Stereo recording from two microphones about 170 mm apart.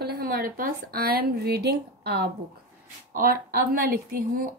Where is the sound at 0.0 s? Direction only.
65° right (ahead or behind).